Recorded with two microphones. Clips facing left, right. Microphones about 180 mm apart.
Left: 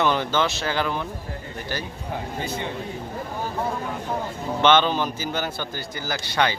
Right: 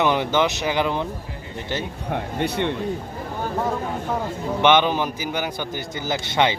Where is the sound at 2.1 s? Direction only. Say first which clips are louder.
Right 5 dB; 65° right (ahead or behind).